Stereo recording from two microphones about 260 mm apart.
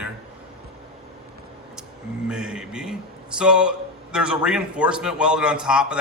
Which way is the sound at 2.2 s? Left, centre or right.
Centre.